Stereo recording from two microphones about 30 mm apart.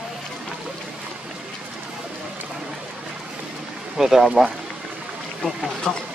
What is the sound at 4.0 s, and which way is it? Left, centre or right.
Speech, centre.